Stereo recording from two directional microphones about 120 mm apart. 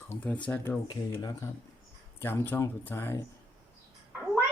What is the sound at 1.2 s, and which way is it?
Speech, 35° left (ahead or behind).